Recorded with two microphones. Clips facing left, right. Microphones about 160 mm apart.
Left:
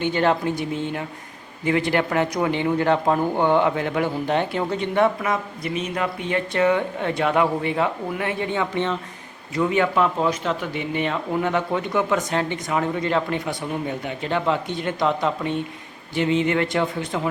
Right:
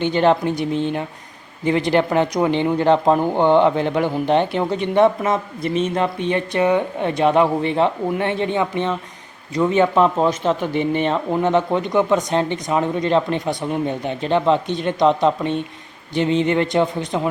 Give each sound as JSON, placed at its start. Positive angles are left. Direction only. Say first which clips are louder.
{"t": 0.0, "sound": "speech", "louder": "right 4 dB", "side_deg": -20}